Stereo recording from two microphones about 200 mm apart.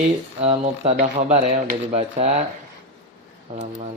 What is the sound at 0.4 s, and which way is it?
Speech, 30° right (ahead or behind).